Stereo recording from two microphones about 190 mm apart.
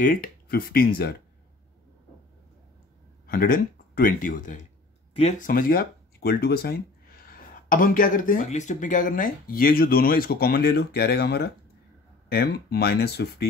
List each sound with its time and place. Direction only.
0.0 s speech: 50° left (ahead or behind)
3.3 s speech: 50° left (ahead or behind)
5.5 s speech: 50° left (ahead or behind)